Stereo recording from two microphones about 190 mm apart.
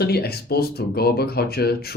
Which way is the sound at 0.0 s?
55° left (ahead or behind).